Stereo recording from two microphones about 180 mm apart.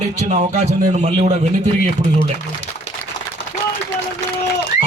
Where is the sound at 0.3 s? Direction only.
40° right (ahead or behind).